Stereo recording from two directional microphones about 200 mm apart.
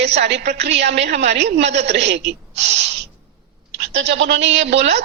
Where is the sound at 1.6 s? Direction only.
35° right (ahead or behind).